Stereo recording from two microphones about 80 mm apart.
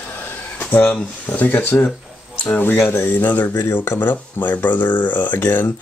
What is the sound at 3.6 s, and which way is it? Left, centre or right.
Speech, left.